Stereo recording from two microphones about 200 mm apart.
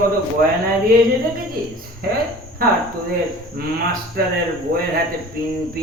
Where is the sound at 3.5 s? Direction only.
50° right (ahead or behind).